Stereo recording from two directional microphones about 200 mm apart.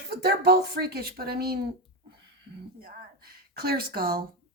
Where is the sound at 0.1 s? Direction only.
55° right (ahead or behind).